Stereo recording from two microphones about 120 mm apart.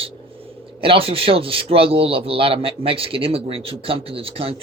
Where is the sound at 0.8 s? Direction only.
50° right (ahead or behind).